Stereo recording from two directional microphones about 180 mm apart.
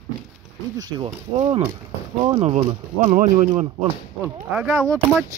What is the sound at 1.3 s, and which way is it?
Speech, 35° right (ahead or behind).